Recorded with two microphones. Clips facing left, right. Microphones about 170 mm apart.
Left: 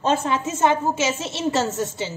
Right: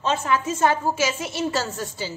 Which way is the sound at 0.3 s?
20° left (ahead or behind).